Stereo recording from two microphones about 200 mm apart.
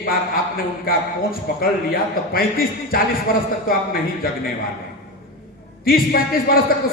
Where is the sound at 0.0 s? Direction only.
45° left (ahead or behind).